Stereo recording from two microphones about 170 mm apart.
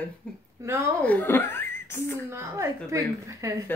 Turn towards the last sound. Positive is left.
turn(degrees=-15)  # may be behind; listen again after turning